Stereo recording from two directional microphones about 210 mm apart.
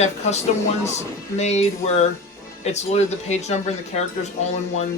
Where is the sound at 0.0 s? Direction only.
30° left (ahead or behind).